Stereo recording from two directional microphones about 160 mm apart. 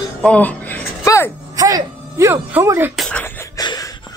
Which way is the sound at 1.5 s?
20° right (ahead or behind).